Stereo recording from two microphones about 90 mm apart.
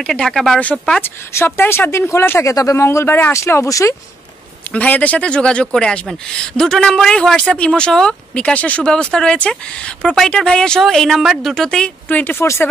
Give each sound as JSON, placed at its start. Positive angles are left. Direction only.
{"t": 0.0, "sound": "speech", "side_deg": 10}
{"t": 1.3, "sound": "speech", "side_deg": 25}
{"t": 4.7, "sound": "speech", "side_deg": 15}
{"t": 12.1, "sound": "speech", "side_deg": 20}